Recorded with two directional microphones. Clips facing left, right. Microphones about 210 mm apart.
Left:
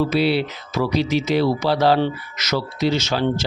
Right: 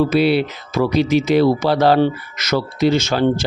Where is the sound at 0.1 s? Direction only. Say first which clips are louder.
Right 4 dB; 55° right (ahead or behind).